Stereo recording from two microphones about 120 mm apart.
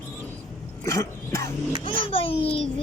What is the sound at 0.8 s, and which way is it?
Dog, 25° left (ahead or behind).